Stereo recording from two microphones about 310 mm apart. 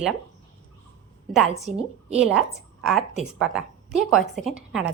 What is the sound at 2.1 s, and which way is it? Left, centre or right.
A woman's voice, centre.